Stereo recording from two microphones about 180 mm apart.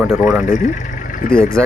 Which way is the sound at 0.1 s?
Centre (ahead or behind).